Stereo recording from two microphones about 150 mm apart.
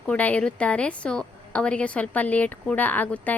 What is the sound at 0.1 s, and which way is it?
A woman's voice, 10° left (ahead or behind).